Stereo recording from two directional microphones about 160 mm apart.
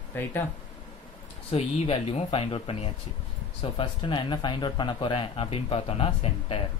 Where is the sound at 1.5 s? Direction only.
40° left (ahead or behind).